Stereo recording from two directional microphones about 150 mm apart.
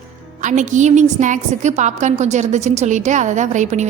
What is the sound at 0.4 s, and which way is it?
A woman's voice, 55° right (ahead or behind).